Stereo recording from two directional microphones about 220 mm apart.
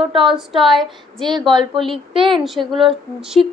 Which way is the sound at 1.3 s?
20° right (ahead or behind).